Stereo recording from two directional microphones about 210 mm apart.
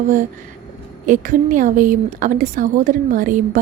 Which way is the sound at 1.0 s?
40° right (ahead or behind).